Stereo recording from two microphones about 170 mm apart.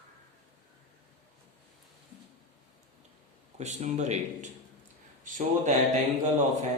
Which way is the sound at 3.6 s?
45° right (ahead or behind).